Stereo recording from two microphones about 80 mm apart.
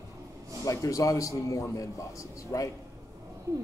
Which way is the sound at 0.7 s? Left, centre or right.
Left.